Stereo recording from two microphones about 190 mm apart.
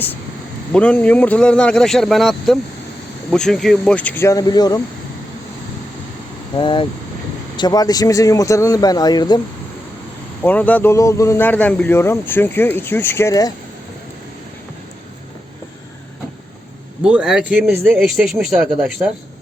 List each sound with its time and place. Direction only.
0.7 s a man's voice: 5° left (ahead or behind)
6.6 s a man's voice: 25° left (ahead or behind)
10.4 s speech: 10° left (ahead or behind)
17.0 s a man's voice: 5° right (ahead or behind)